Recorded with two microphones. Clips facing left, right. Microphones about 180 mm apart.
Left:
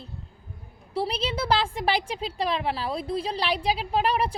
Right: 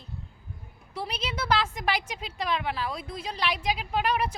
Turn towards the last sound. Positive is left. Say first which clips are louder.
# left 3 dB
turn(degrees=30)  # may be behind; listen again after turning